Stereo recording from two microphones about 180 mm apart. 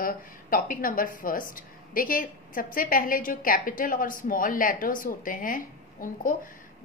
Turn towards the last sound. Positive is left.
turn(degrees=50)  # may be behind; listen again after turning